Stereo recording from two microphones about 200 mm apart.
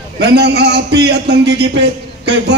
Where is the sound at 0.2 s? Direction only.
55° right (ahead or behind).